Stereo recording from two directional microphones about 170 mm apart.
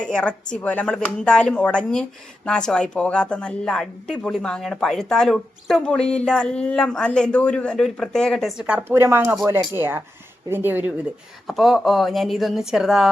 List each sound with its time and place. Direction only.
0.0 s speech: 5° left (ahead or behind)